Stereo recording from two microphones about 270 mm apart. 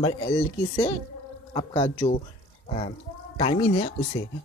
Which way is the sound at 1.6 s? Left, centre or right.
Centre.